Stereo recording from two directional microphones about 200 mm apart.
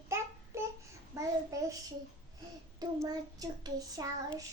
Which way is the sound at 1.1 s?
15° right (ahead or behind).